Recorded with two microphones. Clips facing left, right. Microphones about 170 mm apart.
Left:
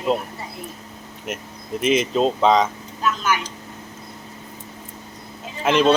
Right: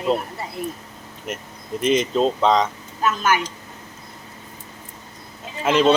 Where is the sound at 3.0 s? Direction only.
50° right (ahead or behind).